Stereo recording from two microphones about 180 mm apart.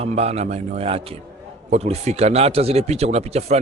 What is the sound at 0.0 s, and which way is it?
A man's voice, 35° right (ahead or behind).